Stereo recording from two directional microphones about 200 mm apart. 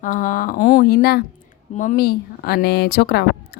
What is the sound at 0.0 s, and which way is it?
A woman's voice, 40° left (ahead or behind).